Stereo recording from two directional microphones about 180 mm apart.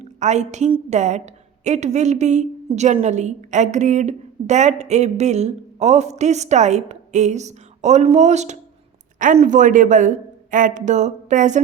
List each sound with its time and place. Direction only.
0.0 s a woman's voice: 40° right (ahead or behind)